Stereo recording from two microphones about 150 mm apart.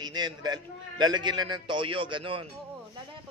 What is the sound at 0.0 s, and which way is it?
A man's voice, 30° right (ahead or behind).